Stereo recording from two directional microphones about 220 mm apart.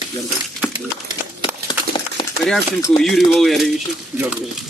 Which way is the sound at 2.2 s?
20° left (ahead or behind).